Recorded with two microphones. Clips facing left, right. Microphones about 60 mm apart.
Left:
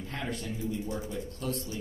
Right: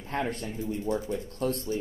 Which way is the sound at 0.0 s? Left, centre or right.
Right.